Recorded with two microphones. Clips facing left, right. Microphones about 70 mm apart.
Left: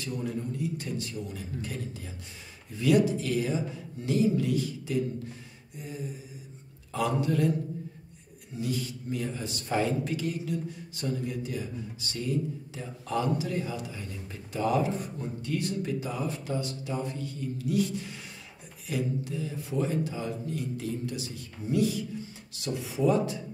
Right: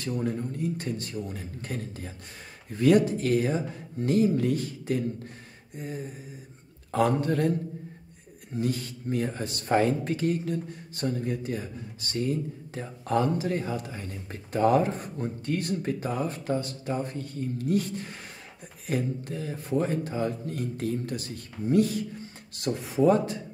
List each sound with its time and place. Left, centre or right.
0.0 s speech: right
8.5 s speech: right